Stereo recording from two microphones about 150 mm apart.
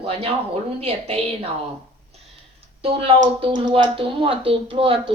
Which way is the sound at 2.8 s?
40° right (ahead or behind).